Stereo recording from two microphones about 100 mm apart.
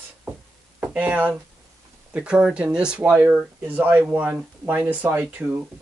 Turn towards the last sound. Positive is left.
turn(degrees=-15)  # may be behind; listen again after turning